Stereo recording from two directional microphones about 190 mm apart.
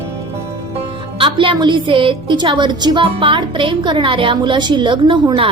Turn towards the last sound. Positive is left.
turn(degrees=-25)  # may be behind; listen again after turning